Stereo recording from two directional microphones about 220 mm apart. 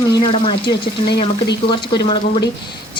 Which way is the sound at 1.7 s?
20° left (ahead or behind).